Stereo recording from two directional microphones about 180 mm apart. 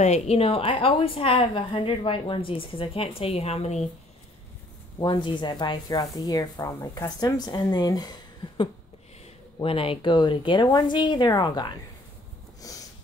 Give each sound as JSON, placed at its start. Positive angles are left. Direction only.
{"t": 0.0, "sound": "a woman's voice", "side_deg": 40}
{"t": 4.9, "sound": "speech", "side_deg": 25}
{"t": 12.6, "sound": "sniff", "side_deg": 20}